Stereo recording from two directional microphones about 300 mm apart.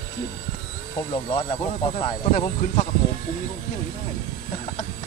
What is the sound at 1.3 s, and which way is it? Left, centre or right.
Speech, centre.